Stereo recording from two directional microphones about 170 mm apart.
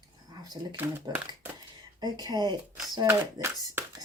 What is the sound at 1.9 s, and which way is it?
Speech, 25° right (ahead or behind).